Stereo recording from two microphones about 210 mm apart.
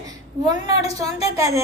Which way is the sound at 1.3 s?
15° right (ahead or behind).